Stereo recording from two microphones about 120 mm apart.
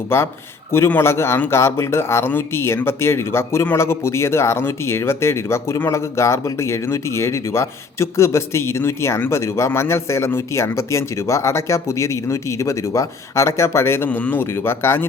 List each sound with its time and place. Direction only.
0.1 s a man's voice: 20° left (ahead or behind)